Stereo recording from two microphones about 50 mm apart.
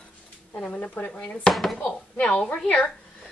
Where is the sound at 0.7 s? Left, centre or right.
Left.